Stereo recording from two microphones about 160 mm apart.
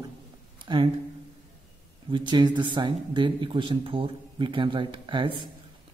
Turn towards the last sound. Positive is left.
turn(degrees=-30)  # may be behind; listen again after turning